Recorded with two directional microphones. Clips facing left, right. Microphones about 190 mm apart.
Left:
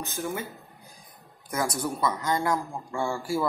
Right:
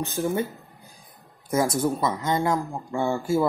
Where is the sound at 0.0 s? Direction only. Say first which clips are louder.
Right 6 dB; 30° right (ahead or behind).